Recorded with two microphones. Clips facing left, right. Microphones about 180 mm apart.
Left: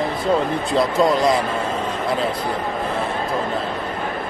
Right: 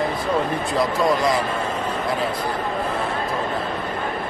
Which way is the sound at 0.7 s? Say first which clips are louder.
Left 3 dB; 25° left (ahead or behind).